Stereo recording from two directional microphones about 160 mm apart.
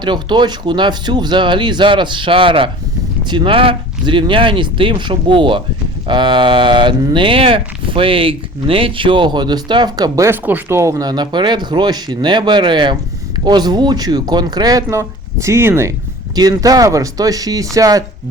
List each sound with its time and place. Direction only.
0.0 s speech: 30° right (ahead or behind)